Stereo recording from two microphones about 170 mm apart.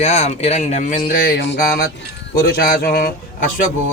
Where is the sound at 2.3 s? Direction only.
65° left (ahead or behind).